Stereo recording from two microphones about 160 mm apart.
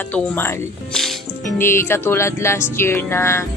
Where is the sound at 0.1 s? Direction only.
10° left (ahead or behind).